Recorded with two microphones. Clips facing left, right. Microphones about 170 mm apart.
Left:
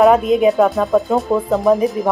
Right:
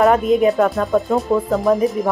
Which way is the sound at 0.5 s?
Centre (ahead or behind).